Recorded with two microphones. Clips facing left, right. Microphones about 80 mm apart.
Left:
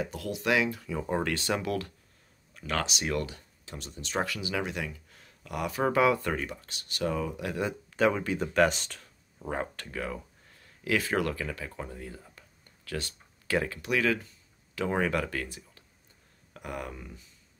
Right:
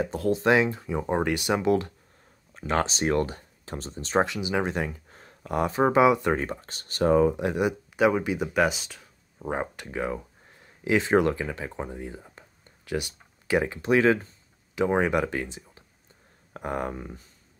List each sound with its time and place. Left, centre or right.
0.0 s speech: right
4.3 s speech: right
4.6 s speech: right
6.3 s speech: right; by 9.5 s centre
9.5 s speech: centre
13.7 s speech: right
16.5 s speech: right